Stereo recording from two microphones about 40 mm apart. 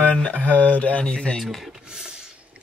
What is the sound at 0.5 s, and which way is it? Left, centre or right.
Speech, left.